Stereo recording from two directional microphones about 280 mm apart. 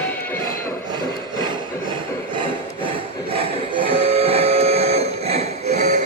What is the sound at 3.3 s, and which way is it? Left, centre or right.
Printer, centre.